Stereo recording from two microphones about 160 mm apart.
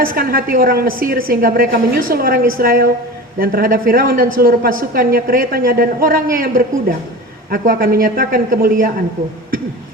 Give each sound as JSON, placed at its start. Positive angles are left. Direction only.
{"t": 0.0, "sound": "a woman's voice", "side_deg": -65}